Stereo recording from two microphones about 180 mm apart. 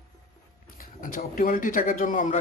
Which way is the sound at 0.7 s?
50° left (ahead or behind).